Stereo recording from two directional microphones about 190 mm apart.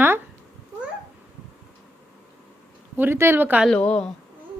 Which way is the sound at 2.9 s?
10° right (ahead or behind).